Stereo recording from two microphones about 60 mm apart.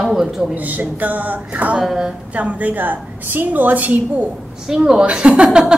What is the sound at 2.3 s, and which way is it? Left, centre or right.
A woman's voice, right.